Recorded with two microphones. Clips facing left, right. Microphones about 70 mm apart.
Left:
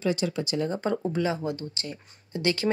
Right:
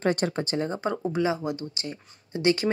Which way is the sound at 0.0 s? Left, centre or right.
Right.